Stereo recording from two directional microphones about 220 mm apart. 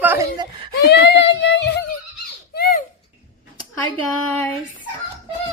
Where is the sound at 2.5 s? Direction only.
45° left (ahead or behind).